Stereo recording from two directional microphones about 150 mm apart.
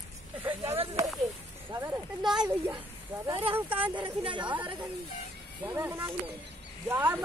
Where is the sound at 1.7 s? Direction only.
20° right (ahead or behind).